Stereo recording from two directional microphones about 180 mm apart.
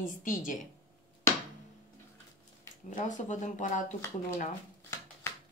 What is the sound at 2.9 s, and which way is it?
Speech, 45° left (ahead or behind).